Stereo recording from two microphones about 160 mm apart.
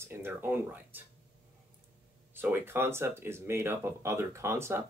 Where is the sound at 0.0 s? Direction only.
15° right (ahead or behind).